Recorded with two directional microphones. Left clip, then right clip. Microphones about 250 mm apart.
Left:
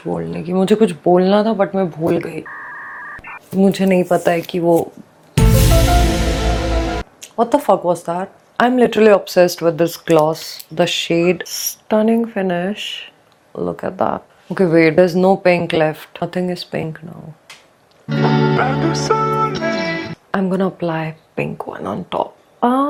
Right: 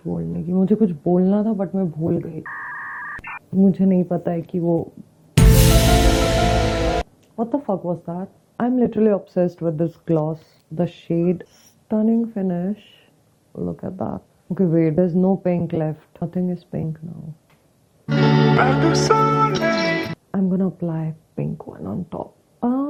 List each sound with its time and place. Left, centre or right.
0.0 s speech: centre
2.0 s telephone dialing: centre
3.5 s speech: centre
5.3 s music: centre
7.3 s speech: centre
18.1 s music: left
18.5 s music: centre
20.3 s speech: centre